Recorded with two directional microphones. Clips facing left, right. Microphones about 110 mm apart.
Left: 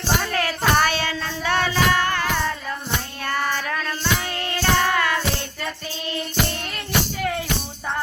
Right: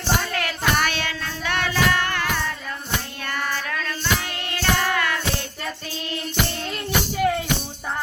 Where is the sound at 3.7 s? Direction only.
30° left (ahead or behind).